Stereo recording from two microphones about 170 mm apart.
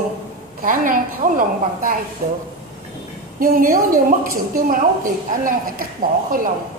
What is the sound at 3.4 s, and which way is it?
A woman's voice, 55° right (ahead or behind).